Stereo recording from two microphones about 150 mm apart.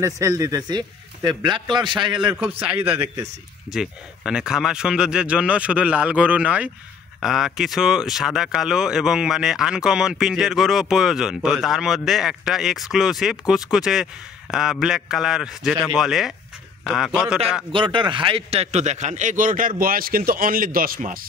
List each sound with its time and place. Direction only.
0.0 s speech: 20° right (ahead or behind)
2.3 s speech: 10° right (ahead or behind)
17.7 s a man's voice: 35° right (ahead or behind); by 21.3 s 70° right (ahead or behind)